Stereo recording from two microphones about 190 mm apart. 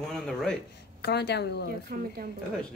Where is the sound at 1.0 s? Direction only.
60° left (ahead or behind).